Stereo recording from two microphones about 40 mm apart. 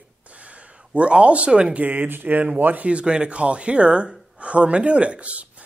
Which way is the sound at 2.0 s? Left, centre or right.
Right.